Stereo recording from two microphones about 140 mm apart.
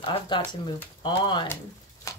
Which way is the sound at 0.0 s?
40° left (ahead or behind).